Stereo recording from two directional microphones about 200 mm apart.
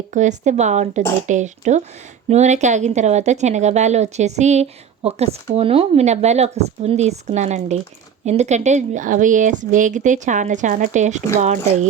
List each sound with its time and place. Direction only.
0.1 s speech: 35° right (ahead or behind)